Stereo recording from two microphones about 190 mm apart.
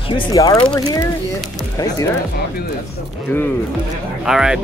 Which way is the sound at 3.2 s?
10° left (ahead or behind).